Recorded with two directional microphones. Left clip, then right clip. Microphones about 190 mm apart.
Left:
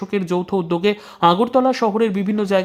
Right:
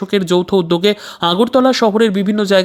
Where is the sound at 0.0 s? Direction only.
20° right (ahead or behind).